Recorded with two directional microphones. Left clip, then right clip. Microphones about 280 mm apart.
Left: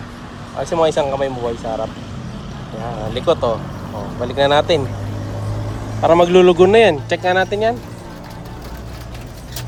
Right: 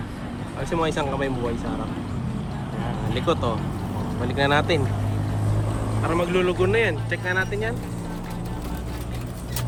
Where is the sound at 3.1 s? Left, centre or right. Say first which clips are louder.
Left 8 dB; centre.